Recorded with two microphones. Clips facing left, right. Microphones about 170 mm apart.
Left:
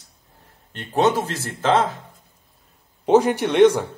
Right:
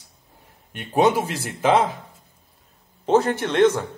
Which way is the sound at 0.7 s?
10° right (ahead or behind).